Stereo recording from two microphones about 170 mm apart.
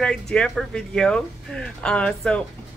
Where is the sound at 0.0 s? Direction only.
5° left (ahead or behind).